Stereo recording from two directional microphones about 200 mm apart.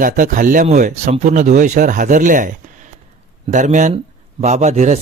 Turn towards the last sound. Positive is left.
turn(degrees=-35)  # may be behind; listen again after turning